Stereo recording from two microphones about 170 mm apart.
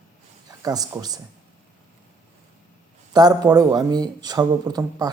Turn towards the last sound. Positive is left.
turn(degrees=-20)  # may be behind; listen again after turning